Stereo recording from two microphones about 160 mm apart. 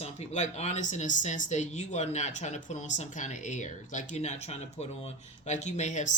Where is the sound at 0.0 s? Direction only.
45° left (ahead or behind).